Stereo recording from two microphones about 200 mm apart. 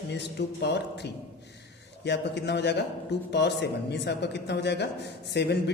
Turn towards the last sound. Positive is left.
turn(degrees=60)  # may be behind; listen again after turning